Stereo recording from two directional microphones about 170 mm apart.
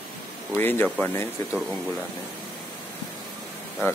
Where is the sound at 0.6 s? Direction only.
10° left (ahead or behind).